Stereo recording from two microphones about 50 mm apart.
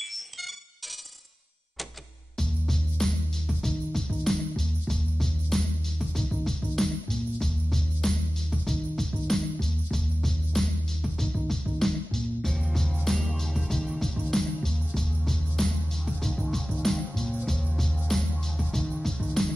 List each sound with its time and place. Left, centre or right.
2.3 s music: centre